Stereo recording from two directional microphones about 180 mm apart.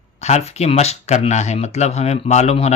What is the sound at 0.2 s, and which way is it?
Speech, 40° left (ahead or behind).